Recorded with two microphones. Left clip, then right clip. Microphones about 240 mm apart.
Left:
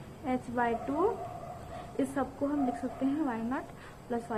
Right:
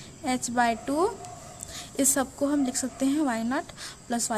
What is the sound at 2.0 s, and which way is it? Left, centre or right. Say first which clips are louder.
A woman's voice: right 6 dB; right.